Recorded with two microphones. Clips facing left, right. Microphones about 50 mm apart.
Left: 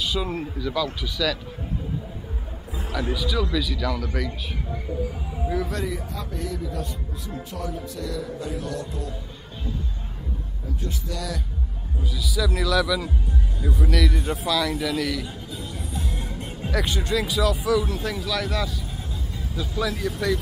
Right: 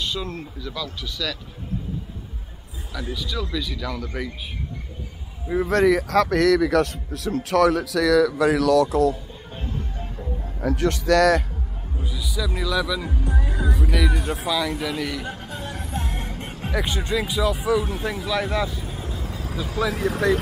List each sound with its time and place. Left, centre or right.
0.0 s speech: centre
3.2 s speech: centre
5.7 s speech: right
10.6 s a man's voice: right
12.0 s speech: right
12.4 s a man's voice: centre
13.2 s music: right
13.8 s a man's voice: centre
15.2 s music: right
16.7 s speech: right
19.2 s vehicle: right
19.8 s speech: centre